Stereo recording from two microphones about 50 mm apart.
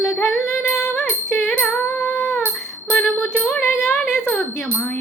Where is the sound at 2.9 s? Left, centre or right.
Left.